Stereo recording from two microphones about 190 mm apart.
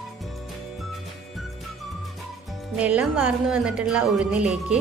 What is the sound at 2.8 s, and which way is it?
A woman's voice, 5° right (ahead or behind).